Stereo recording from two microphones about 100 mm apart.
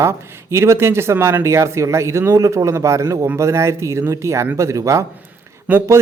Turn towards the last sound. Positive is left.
turn(degrees=-15)  # may be behind; listen again after turning